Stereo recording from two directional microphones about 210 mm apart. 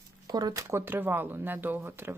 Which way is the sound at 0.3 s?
20° right (ahead or behind).